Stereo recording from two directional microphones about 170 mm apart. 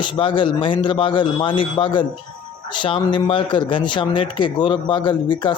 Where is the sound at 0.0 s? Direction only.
30° left (ahead or behind).